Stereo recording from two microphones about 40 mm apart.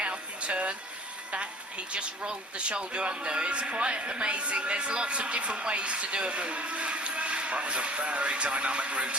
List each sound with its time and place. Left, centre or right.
0.0 s music: right
1.9 s speech: right